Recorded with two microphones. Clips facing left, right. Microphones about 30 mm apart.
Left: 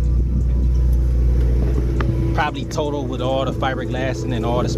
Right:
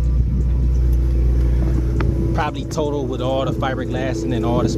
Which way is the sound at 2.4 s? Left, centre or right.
Centre.